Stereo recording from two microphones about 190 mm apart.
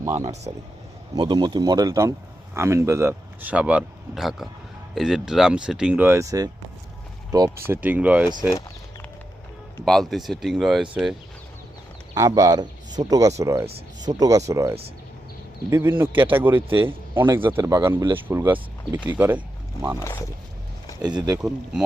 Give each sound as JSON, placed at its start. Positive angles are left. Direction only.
{"t": 0.5, "sound": "speech", "side_deg": -30}
{"t": 7.7, "sound": "speech", "side_deg": -10}
{"t": 9.7, "sound": "speech", "side_deg": 0}
{"t": 12.1, "sound": "speech", "side_deg": -20}
{"t": 13.7, "sound": "speech", "side_deg": -25}
{"t": 15.8, "sound": "speech", "side_deg": -10}
{"t": 21.0, "sound": "speech", "side_deg": -20}
{"t": 21.3, "sound": "speech", "side_deg": -5}